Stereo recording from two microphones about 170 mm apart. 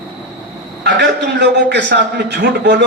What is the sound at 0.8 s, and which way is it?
A man's voice, 85° right.